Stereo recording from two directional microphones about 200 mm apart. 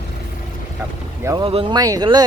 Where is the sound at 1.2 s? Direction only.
25° right (ahead or behind).